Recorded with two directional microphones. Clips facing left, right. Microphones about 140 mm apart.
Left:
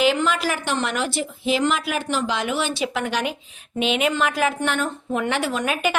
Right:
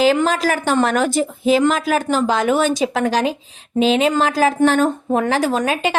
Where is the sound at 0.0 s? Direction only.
40° right (ahead or behind).